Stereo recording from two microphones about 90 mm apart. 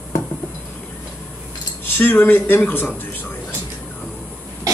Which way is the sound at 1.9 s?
20° left (ahead or behind).